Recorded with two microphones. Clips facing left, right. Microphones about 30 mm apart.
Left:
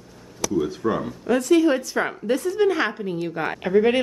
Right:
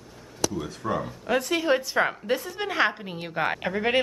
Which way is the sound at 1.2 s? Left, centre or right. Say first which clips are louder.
Left 7 dB; centre.